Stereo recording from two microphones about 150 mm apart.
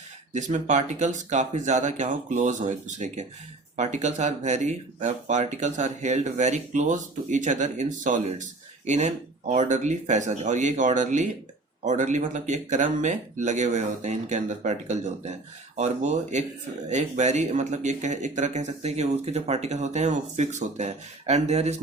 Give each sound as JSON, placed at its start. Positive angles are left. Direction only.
{"t": 0.3, "sound": "speech", "side_deg": -55}